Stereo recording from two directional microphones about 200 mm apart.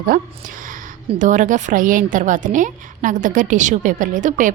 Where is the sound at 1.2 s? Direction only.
40° right (ahead or behind).